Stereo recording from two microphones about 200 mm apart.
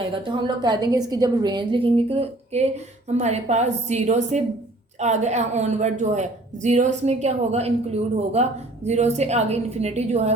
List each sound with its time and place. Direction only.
0.0 s a woman's voice: 25° right (ahead or behind)